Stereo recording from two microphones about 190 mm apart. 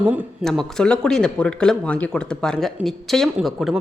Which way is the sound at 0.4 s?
Centre (ahead or behind).